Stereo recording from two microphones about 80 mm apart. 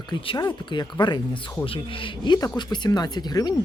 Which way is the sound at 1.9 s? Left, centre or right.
Left.